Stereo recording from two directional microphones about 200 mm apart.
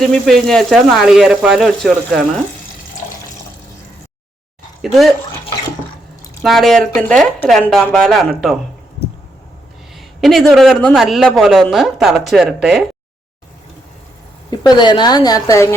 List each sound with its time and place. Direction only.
0.0 s speech: centre (ahead or behind)
4.8 s speech: centre (ahead or behind)
6.4 s speech: centre (ahead or behind)
10.2 s speech: centre (ahead or behind)
14.5 s a woman's voice: 20° left (ahead or behind)